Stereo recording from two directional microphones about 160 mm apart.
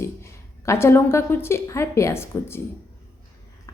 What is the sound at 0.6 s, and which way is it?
A woman's voice, 15° left (ahead or behind).